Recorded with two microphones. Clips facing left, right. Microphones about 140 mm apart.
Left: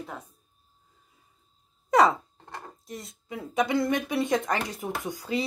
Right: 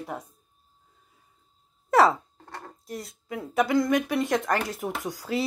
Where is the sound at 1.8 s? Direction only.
5° right (ahead or behind).